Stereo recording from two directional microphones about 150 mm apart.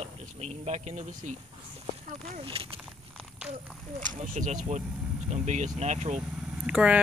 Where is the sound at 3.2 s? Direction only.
5° right (ahead or behind).